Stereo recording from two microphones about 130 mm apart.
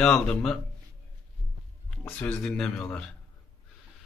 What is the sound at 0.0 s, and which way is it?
Speech, 5° left (ahead or behind).